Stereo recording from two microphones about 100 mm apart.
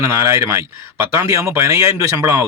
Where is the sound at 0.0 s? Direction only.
25° right (ahead or behind).